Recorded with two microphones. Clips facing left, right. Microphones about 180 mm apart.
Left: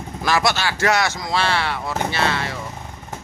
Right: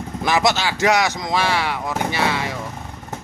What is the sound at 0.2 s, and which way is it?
Speech, 20° right (ahead or behind).